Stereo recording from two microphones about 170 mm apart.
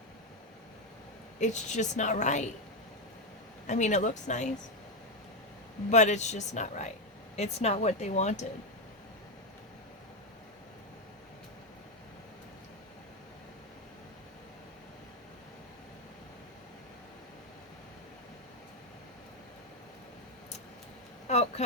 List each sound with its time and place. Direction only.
1.4 s a woman's voice: 45° left (ahead or behind)
3.7 s a woman's voice: 45° left (ahead or behind)
5.9 s a woman's voice: 45° left (ahead or behind)
21.2 s a sound: 40° left (ahead or behind)